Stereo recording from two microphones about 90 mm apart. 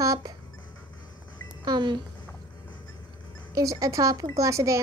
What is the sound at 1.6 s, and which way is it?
Speech, 55° right (ahead or behind).